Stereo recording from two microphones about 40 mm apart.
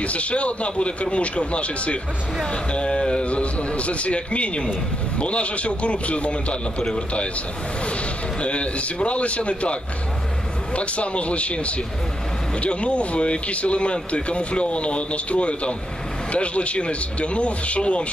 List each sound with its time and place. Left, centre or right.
0.0 s a man's voice: left
8.4 s a man's voice: left